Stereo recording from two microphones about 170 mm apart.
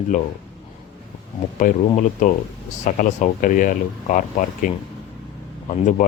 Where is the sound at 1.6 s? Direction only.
50° left (ahead or behind).